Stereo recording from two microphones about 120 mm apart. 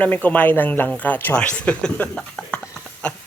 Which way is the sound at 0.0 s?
15° left (ahead or behind).